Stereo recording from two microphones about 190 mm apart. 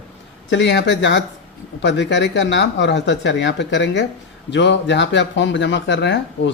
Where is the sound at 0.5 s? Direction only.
65° left (ahead or behind).